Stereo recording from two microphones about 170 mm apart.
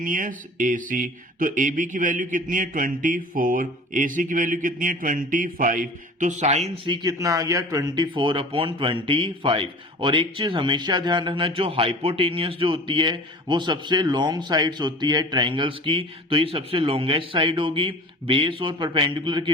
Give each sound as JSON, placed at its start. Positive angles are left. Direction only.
{"t": 0.0, "sound": "mantra", "side_deg": -50}